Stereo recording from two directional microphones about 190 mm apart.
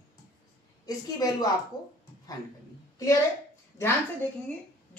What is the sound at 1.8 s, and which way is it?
Speech, 20° left (ahead or behind).